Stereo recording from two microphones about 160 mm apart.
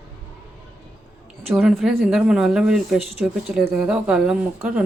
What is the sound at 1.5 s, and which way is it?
Speech, 5° right (ahead or behind).